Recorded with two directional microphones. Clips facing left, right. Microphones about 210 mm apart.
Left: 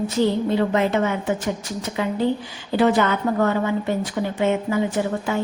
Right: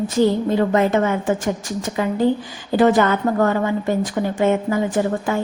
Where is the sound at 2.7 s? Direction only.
45° right (ahead or behind).